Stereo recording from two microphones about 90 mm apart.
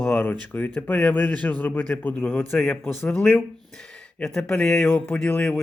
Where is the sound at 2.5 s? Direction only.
5° left (ahead or behind).